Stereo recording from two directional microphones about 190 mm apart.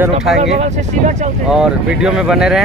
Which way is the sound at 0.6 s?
40° right (ahead or behind).